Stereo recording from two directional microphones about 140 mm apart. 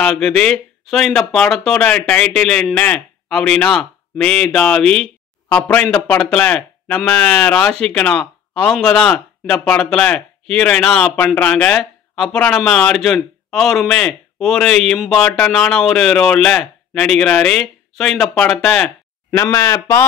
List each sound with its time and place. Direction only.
0.0 s a man's voice: 5° left (ahead or behind)
19.3 s speech: 20° left (ahead or behind)